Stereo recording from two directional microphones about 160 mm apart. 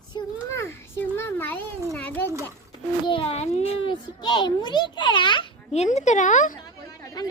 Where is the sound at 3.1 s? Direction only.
35° left (ahead or behind).